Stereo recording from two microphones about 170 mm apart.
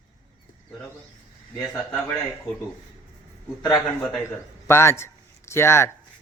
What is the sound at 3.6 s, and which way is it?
A man's voice, 25° left (ahead or behind).